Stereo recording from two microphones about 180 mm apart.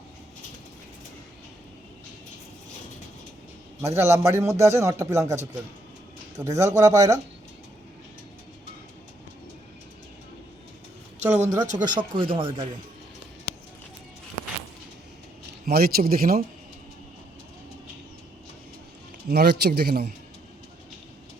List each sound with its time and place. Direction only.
3.8 s a man's voice: 15° right (ahead or behind)
11.3 s speech: 40° right (ahead or behind)
11.9 s speech: 30° right (ahead or behind)
15.6 s a man's voice: 60° right (ahead or behind)
19.3 s a man's voice: 60° right (ahead or behind)